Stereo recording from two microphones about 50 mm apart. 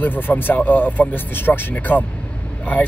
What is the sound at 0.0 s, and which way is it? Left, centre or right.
Speech, left.